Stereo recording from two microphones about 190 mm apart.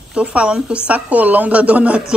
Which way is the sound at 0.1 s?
5° right (ahead or behind).